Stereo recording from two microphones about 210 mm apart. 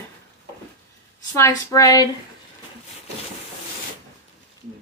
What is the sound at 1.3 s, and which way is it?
Speech, 15° left (ahead or behind).